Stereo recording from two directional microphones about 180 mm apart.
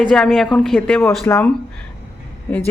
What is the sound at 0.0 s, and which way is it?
Speech, centre (ahead or behind).